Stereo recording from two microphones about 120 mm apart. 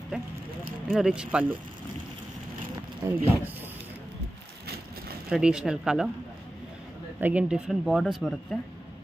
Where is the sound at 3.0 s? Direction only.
25° right (ahead or behind).